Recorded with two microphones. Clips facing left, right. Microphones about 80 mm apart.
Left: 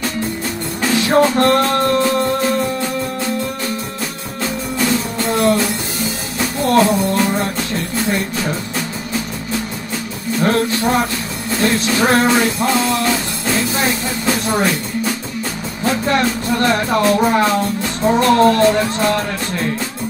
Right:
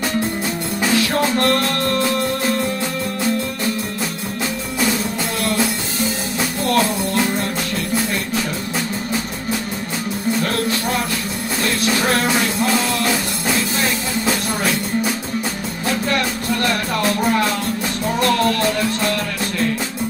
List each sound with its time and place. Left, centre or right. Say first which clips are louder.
0.9 s music: left 6 dB; left
5.3 s music: left 11 dB; left
6.6 s music: left 6 dB; left
10.4 s music: left 5 dB; left
15.8 s music: left 4 dB; left